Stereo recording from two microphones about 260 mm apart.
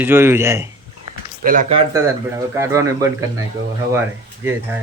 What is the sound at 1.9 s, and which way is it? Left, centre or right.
Speech, centre.